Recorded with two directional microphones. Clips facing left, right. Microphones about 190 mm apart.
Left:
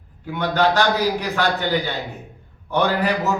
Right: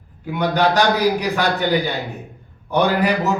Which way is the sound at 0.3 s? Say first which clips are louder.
Right 1 dB; 15° right (ahead or behind).